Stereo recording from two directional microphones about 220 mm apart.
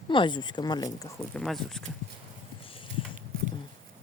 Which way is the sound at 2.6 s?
25° left (ahead or behind).